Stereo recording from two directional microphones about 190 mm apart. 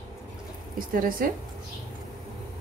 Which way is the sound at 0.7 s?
45° right (ahead or behind).